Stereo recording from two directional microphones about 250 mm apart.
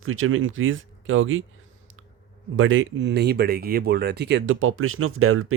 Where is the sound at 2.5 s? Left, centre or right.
Right.